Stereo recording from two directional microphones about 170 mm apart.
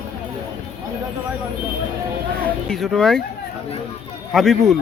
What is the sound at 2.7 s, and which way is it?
Speech, centre (ahead or behind).